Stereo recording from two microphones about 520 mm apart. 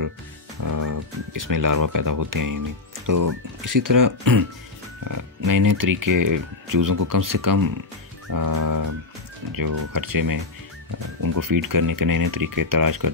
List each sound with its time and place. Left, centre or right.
0.7 s speech: right